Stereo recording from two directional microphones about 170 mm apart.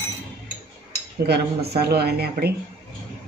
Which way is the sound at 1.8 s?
70° right (ahead or behind).